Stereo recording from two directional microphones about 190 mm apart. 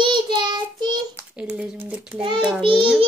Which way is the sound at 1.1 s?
5° right (ahead or behind).